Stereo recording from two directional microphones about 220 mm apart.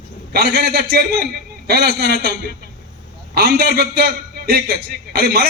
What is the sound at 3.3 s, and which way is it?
A man's voice, 45° right (ahead or behind).